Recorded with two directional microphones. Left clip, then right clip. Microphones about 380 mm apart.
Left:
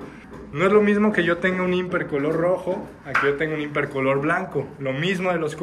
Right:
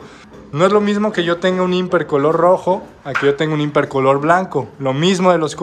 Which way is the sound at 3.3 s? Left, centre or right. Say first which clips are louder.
Right 8 dB; centre.